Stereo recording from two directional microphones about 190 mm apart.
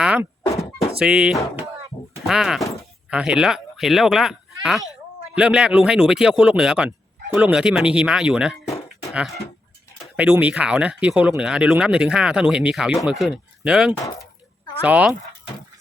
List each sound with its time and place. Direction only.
0.0 s thunk: 5° right (ahead or behind)
0.4 s music: 15° left (ahead or behind)
0.9 s speech: 5° right (ahead or behind)